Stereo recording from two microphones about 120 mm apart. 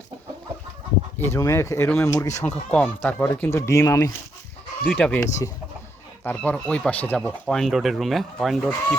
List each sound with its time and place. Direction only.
1.2 s speech: 25° left (ahead or behind)
2.4 s speech: 10° left (ahead or behind); by 4.1 s 25° left (ahead or behind)
4.9 s speech: 10° left (ahead or behind)
6.2 s speech: 10° left (ahead or behind)
7.4 s speech: centre (ahead or behind)